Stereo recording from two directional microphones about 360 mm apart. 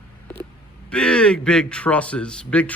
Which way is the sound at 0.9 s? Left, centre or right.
Centre.